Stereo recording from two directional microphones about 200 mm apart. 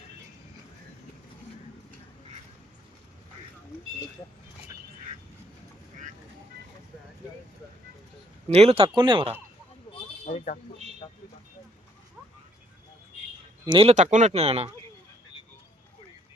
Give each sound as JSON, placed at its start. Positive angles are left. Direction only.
{"t": 8.4, "sound": "speech", "side_deg": -30}
{"t": 10.2, "sound": "speech", "side_deg": 40}
{"t": 13.7, "sound": "speech", "side_deg": -30}